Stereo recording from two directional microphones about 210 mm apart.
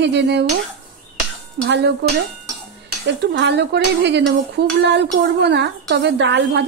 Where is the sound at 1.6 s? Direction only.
55° right (ahead or behind).